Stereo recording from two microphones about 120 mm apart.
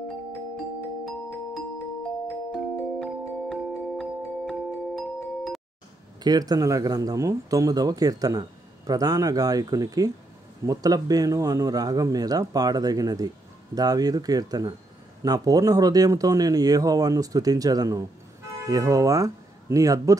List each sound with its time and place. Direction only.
2.5 s music: 5° left (ahead or behind)
6.2 s speech: 35° right (ahead or behind)